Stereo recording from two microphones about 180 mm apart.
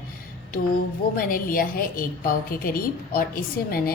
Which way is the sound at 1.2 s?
55° left (ahead or behind).